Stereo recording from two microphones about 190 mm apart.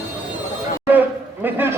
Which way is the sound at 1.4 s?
10° right (ahead or behind).